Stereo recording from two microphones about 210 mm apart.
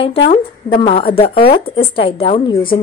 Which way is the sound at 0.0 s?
25° left (ahead or behind).